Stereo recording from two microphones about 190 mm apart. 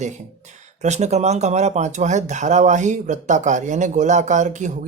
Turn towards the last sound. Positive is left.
turn(degrees=-40)  # may be behind; listen again after turning